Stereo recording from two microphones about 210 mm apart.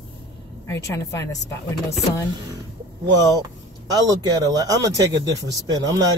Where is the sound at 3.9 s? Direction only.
20° right (ahead or behind).